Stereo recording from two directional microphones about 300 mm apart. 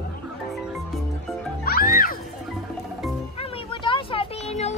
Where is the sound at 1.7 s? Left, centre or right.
Left.